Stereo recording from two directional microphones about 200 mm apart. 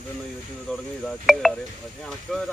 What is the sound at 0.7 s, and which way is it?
Speech, centre (ahead or behind).